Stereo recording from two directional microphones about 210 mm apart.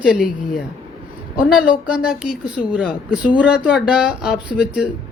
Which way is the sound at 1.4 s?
5° right (ahead or behind).